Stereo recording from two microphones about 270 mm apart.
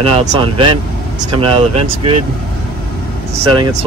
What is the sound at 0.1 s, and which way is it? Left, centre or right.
Speech, centre.